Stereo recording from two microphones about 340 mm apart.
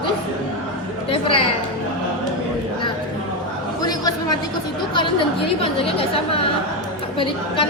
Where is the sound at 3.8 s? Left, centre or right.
Centre.